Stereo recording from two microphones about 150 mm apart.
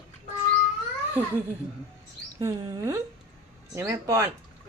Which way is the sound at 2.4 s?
25° right (ahead or behind).